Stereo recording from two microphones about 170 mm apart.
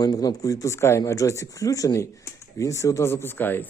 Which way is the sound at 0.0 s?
25° left (ahead or behind).